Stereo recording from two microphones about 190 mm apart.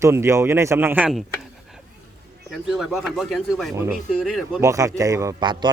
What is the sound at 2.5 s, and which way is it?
Speech, centre (ahead or behind).